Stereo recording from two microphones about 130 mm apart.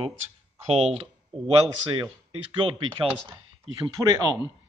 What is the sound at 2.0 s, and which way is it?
Speech, 40° right (ahead or behind).